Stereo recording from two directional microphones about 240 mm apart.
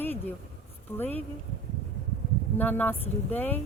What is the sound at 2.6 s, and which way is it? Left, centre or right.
A woman's voice, centre.